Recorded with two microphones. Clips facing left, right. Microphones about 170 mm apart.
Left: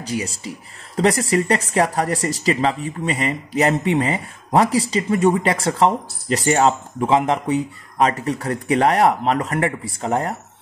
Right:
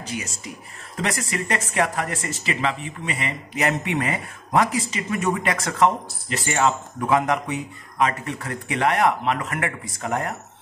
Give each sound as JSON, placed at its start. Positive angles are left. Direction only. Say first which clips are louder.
{"t": 0.0, "sound": "speech", "louder": "left 6 dB", "side_deg": 35}
{"t": 7.0, "sound": "speech", "louder": "left 2 dB", "side_deg": 20}